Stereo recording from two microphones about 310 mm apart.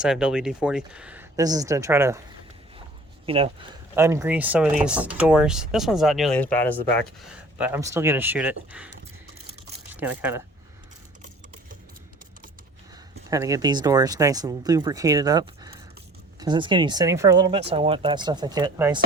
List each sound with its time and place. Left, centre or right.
0.0 s speech: centre
3.2 s speech: centre
9.9 s speech: centre
13.3 s speech: centre